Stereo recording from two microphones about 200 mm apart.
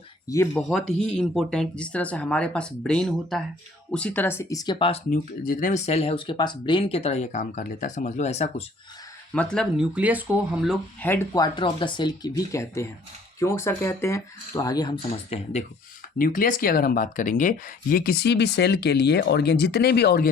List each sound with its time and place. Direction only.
0.5 s speech: centre (ahead or behind); by 4.9 s 25° left (ahead or behind)
5.1 s speech: 40° left (ahead or behind)
9.3 s speech: 5° left (ahead or behind)
11.0 s speech: 10° left (ahead or behind)
11.4 s speech: 25° left (ahead or behind)
16.1 s speech: 45° left (ahead or behind)